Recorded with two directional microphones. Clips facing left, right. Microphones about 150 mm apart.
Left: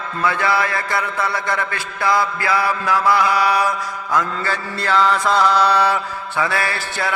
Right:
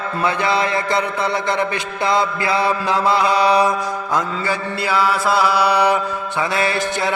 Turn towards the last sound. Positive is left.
turn(degrees=-20)  # may be behind; listen again after turning